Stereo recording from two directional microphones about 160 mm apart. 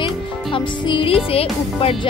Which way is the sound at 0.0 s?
30° left (ahead or behind).